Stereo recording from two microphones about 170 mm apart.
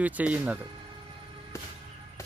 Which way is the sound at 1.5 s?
15° left (ahead or behind).